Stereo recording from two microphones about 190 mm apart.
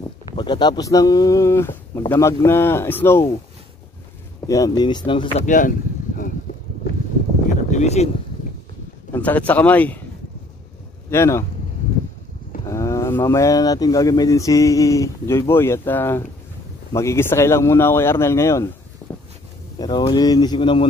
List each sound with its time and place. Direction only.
0.4 s speech: 25° left (ahead or behind)
4.5 s speech: 20° left (ahead or behind)
7.7 s speech: 35° left (ahead or behind)
9.1 s speech: 10° left (ahead or behind)
11.1 s speech: 15° left (ahead or behind)
12.6 s speech: 15° left (ahead or behind)
19.0 s a sound: 15° left (ahead or behind)
19.8 s speech: 20° left (ahead or behind)